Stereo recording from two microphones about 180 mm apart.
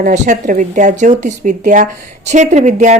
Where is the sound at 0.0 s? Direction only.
45° right (ahead or behind).